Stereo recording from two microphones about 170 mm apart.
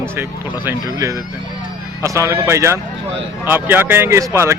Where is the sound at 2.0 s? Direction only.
15° right (ahead or behind).